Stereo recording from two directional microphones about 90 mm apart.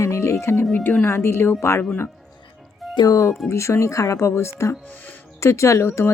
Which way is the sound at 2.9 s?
45° left (ahead or behind).